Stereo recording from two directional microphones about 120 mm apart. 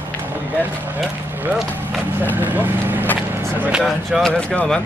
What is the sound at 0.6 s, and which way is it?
Speech, 15° right (ahead or behind).